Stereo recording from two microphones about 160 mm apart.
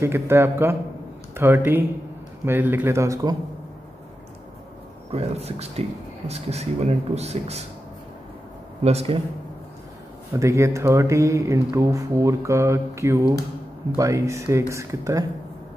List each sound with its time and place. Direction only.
0.0 s speech: 15° right (ahead or behind)
5.1 s speech: 40° right (ahead or behind)
8.8 s speech: 40° right (ahead or behind)
10.3 s speech: 20° right (ahead or behind)